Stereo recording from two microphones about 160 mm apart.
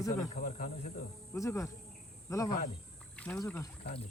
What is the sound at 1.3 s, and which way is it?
Speech, 20° left (ahead or behind).